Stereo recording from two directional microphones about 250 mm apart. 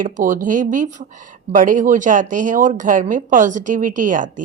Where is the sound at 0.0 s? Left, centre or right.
Right.